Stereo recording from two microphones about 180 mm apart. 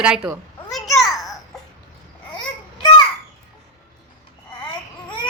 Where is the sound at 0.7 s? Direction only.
Centre (ahead or behind).